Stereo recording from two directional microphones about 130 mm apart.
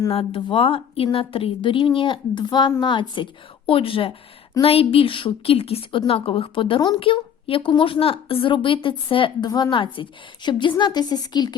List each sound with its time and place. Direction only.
0.1 s a woman's voice: 45° left (ahead or behind)